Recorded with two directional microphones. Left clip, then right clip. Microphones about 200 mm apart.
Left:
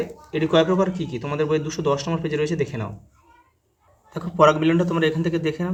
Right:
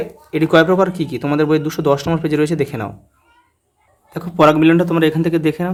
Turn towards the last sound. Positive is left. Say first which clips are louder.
# right 7 dB
turn(degrees=-30)  # may be behind; listen again after turning